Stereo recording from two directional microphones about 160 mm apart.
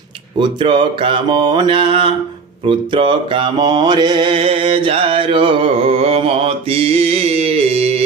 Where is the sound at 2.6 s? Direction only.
30° right (ahead or behind).